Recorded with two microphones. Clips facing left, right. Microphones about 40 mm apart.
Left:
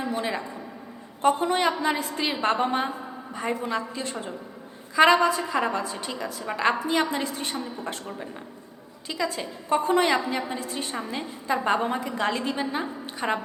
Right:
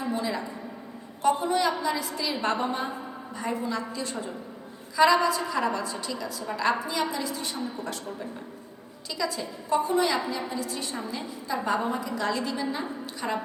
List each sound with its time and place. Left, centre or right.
0.0 s a sound: left
1.2 s a woman's voice: left
9.0 s a woman's voice: left